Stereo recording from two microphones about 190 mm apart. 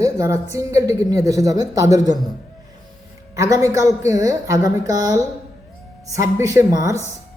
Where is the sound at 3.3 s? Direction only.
15° right (ahead or behind).